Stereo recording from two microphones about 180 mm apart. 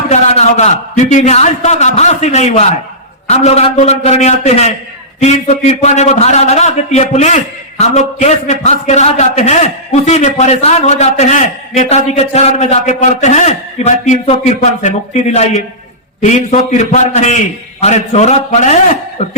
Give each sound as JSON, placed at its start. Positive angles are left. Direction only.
{"t": 0.1, "sound": "a man's voice", "side_deg": 40}